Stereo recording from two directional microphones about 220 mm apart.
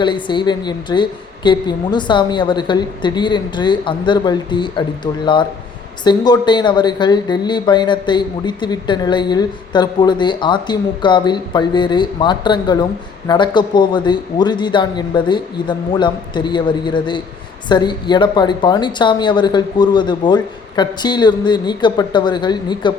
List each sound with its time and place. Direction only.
0.0 s speech: 20° left (ahead or behind)